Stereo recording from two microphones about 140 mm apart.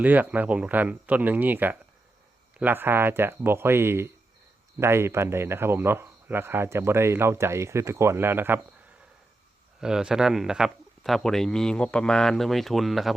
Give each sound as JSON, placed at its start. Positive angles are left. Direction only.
{"t": 0.0, "sound": "speech", "side_deg": -10}
{"t": 9.8, "sound": "speech", "side_deg": -5}